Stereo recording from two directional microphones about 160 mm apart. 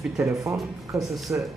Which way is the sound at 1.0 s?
Centre (ahead or behind).